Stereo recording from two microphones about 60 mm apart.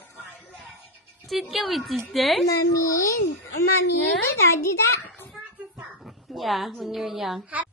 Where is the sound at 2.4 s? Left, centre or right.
Left.